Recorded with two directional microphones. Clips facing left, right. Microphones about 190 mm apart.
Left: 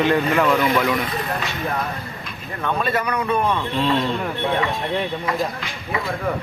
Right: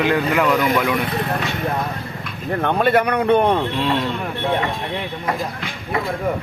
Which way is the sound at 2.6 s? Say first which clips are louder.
Right 6 dB; 65° right (ahead or behind).